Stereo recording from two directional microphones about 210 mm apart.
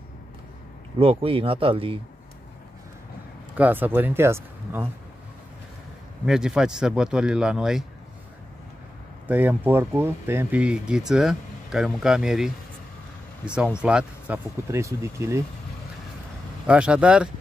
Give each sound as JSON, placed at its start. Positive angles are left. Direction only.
{"t": 0.9, "sound": "speech", "side_deg": -25}
{"t": 3.5, "sound": "speech", "side_deg": -10}
{"t": 6.2, "sound": "speech", "side_deg": -5}
{"t": 9.3, "sound": "speech", "side_deg": -10}
{"t": 13.7, "sound": "speech", "side_deg": -5}
{"t": 16.6, "sound": "speech", "side_deg": -5}